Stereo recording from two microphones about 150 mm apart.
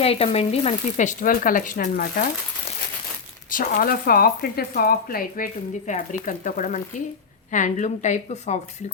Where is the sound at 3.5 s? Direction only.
65° left (ahead or behind).